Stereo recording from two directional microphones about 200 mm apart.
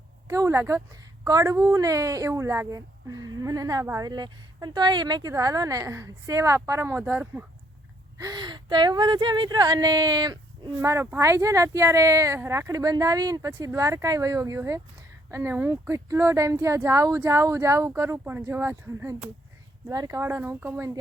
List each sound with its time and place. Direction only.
0.3 s speech: 15° right (ahead or behind)
8.2 s speech: 20° right (ahead or behind)